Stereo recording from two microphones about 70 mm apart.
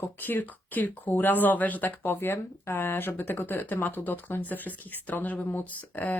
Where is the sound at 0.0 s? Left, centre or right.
Left.